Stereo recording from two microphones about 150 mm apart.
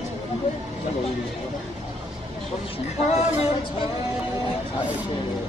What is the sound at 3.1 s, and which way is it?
Speech, 45° left (ahead or behind).